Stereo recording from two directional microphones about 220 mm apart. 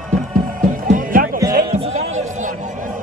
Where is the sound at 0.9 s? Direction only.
40° right (ahead or behind).